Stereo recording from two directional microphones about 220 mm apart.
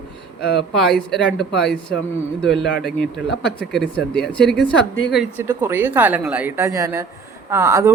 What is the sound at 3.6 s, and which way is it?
A man's voice, 5° left (ahead or behind).